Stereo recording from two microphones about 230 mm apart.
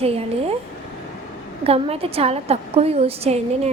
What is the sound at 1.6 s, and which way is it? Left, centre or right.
A woman's voice, right.